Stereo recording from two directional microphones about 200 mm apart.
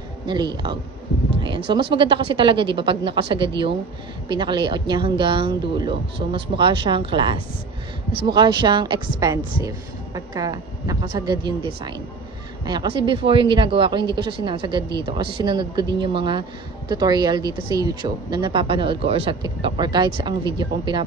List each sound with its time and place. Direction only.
1.7 s speech: 25° right (ahead or behind)